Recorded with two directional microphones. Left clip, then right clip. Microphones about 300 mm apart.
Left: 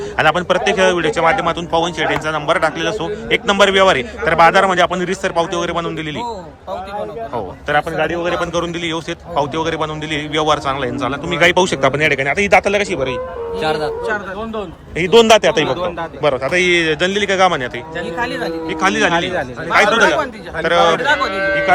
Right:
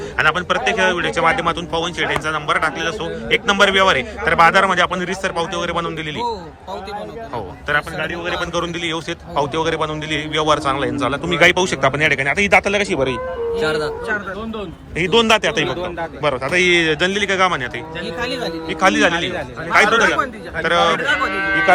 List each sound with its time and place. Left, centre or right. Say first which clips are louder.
0.2 s speech: left 3 dB; centre
7.3 s speech: left 3 dB; centre
13.6 s speech: left 3 dB; centre
14.9 s a man's voice: left 5 dB; centre